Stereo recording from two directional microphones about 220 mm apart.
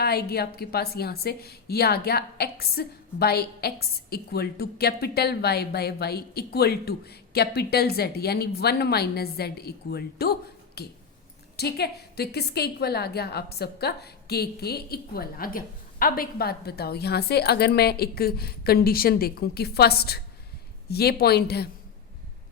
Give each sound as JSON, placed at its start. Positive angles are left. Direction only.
{"t": 0.0, "sound": "a woman's voice", "side_deg": 45}